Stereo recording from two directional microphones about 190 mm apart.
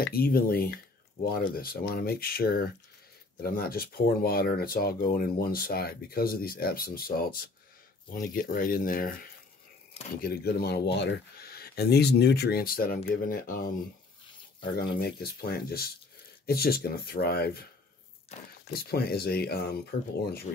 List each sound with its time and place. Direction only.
0.0 s speech: 50° left (ahead or behind)
14.8 s speech: 55° left (ahead or behind)
18.7 s speech: 55° left (ahead or behind)